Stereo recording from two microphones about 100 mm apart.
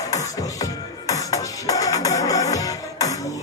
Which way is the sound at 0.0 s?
35° left (ahead or behind).